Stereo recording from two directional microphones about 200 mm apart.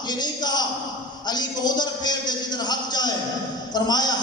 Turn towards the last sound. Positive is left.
turn(degrees=20)  # may be behind; listen again after turning